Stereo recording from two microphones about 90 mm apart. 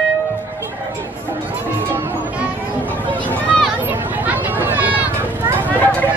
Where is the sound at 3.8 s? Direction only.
20° right (ahead or behind).